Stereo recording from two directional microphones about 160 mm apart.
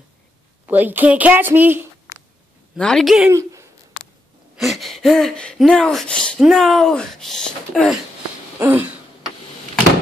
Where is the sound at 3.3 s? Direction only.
20° right (ahead or behind).